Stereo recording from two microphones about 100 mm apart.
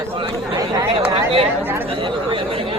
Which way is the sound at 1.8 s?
60° right (ahead or behind).